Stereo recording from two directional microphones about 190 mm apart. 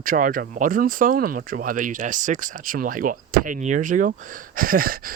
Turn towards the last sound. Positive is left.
turn(degrees=-50)  # may be behind; listen again after turning